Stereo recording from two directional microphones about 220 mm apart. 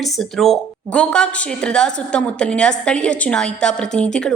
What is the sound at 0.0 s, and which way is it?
A woman's voice, centre (ahead or behind).